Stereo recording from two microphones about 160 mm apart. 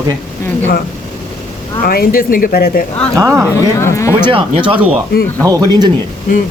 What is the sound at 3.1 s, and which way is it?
Speech, 15° right (ahead or behind).